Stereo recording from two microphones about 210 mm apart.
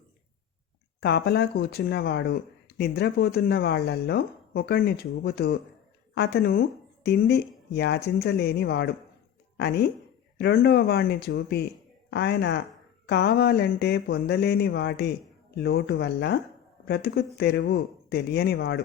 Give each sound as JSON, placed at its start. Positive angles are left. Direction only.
{"t": 1.0, "sound": "speech", "side_deg": 50}